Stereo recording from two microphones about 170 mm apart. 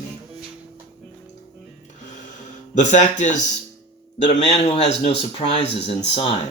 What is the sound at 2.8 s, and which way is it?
Speech, 45° left (ahead or behind).